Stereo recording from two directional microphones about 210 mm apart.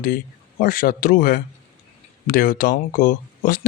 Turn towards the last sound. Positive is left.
turn(degrees=40)  # may be behind; listen again after turning